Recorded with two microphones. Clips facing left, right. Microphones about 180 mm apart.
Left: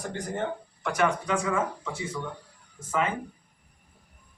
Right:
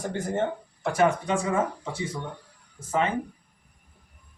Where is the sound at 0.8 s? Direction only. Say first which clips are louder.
Right 3 dB; 30° right (ahead or behind).